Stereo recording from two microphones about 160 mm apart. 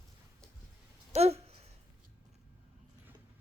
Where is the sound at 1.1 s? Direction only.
40° right (ahead or behind).